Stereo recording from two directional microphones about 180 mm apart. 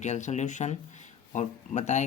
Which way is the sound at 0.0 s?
40° left (ahead or behind).